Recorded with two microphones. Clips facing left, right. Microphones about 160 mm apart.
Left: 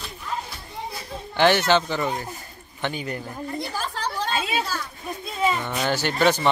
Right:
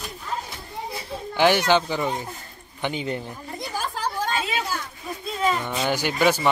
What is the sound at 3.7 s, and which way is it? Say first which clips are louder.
Chatter: right 1 dB; 10° right (ahead or behind).